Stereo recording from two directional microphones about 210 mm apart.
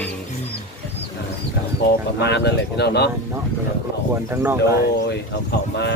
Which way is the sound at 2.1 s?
55° left (ahead or behind).